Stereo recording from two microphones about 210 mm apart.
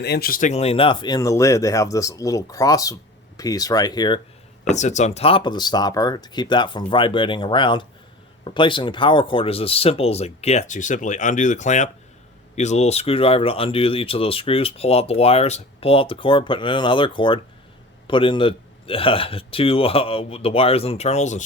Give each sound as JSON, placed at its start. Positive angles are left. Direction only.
{"t": 0.0, "sound": "speech", "side_deg": 50}
{"t": 4.7, "sound": "speech", "side_deg": 35}